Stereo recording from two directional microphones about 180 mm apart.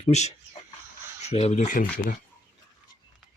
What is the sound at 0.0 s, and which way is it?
Speech, 40° left (ahead or behind).